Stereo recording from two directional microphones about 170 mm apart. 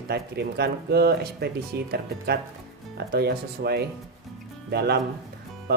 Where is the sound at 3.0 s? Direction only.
70° right (ahead or behind).